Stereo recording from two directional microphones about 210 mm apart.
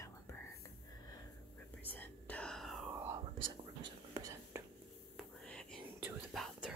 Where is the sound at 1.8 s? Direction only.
10° left (ahead or behind); by 4.6 s 15° right (ahead or behind).